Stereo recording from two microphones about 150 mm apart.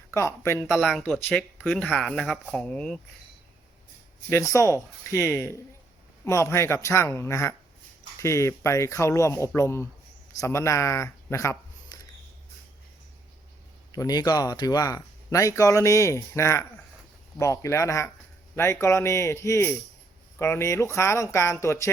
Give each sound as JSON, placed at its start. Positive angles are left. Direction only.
{"t": 0.1, "sound": "speech", "side_deg": 20}
{"t": 0.6, "sound": "speech", "side_deg": 0}
{"t": 4.3, "sound": "speech", "side_deg": 20}
{"t": 13.9, "sound": "speech", "side_deg": 25}